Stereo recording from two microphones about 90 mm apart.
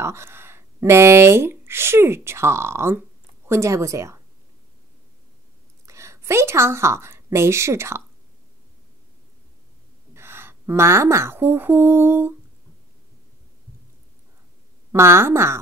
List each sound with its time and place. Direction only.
0.0 s speech: 30° right (ahead or behind)
5.9 s a woman's voice: 30° right (ahead or behind)
10.1 s speech: 25° right (ahead or behind)
14.9 s speech: 30° right (ahead or behind)